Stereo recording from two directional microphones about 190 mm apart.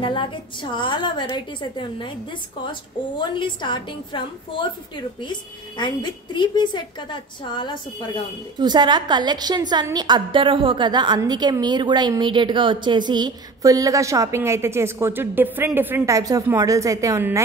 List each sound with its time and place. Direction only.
0.0 s a woman's voice: 25° left (ahead or behind)
3.2 s a woman's voice: 25° left (ahead or behind)
5.8 s a woman's voice: 25° left (ahead or behind)
8.5 s a woman's voice: 20° right (ahead or behind)